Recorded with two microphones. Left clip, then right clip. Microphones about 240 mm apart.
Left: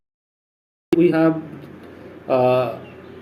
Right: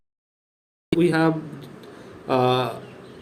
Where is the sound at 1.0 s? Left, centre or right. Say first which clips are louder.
Left 3 dB; right.